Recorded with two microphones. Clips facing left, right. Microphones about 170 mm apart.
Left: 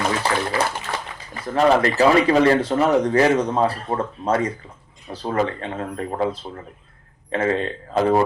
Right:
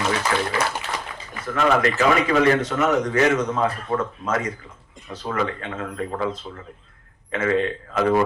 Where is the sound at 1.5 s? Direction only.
35° left (ahead or behind).